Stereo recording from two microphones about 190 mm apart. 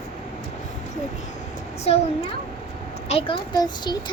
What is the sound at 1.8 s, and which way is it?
A child's voice, 35° left (ahead or behind).